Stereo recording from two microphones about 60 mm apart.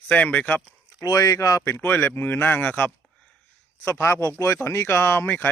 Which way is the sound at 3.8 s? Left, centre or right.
Left.